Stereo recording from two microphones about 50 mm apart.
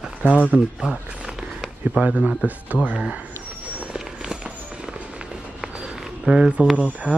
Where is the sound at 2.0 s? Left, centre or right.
Right.